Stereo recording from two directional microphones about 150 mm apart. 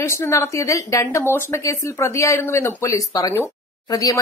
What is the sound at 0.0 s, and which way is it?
Speech, 20° left (ahead or behind).